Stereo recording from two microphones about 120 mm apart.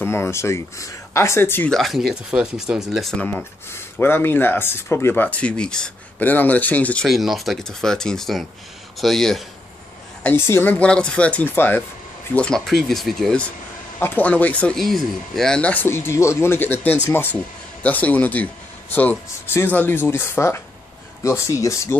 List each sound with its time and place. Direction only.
0.0 s speech: 20° left (ahead or behind)
1.7 s speech: centre (ahead or behind)
3.2 s speech: 10° left (ahead or behind)
7.1 s speech: centre (ahead or behind)
10.2 s speech: 20° left (ahead or behind)
12.4 s speech: 5° left (ahead or behind)
13.9 s speech: 15° left (ahead or behind)